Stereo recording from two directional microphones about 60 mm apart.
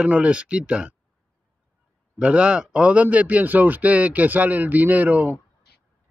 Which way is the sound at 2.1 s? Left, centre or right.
Centre.